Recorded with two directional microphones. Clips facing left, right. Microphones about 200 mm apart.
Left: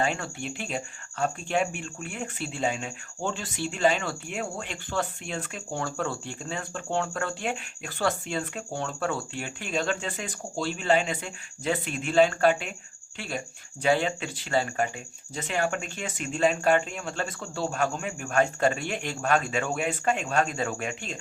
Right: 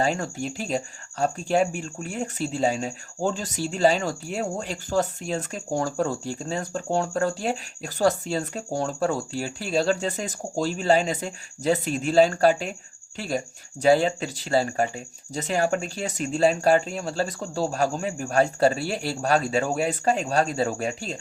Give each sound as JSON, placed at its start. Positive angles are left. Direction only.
{"t": 0.0, "sound": "speech", "side_deg": -40}